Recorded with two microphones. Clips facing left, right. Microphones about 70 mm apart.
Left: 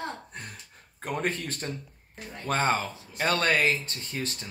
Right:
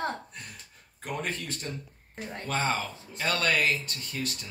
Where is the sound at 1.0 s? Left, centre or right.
Left.